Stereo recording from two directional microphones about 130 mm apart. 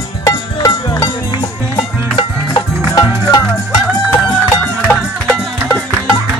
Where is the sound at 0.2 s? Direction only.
25° left (ahead or behind).